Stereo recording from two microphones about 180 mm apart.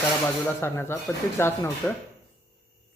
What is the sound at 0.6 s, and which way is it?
Speech, 15° left (ahead or behind).